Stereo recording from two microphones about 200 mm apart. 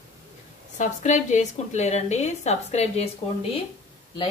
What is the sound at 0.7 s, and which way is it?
A woman's voice, 40° left (ahead or behind).